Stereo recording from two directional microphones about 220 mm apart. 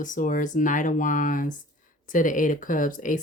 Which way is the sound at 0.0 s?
35° left (ahead or behind).